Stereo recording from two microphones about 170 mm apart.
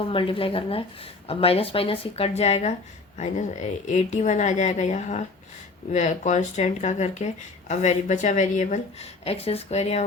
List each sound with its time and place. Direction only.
0.1 s a woman's voice: 30° left (ahead or behind)